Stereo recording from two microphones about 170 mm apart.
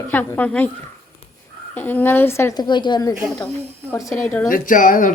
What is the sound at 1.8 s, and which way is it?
A child's voice, 10° left (ahead or behind).